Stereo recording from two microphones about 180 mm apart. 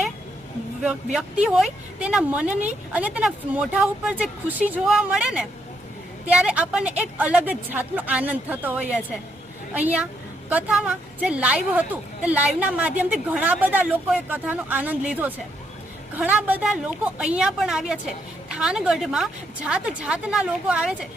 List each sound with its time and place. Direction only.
0.8 s a woman's voice: 5° right (ahead or behind)